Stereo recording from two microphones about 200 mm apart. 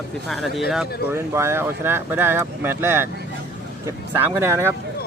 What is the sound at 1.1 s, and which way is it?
Speech, 15° right (ahead or behind).